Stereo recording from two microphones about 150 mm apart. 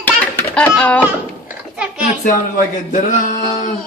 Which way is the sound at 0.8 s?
10° left (ahead or behind).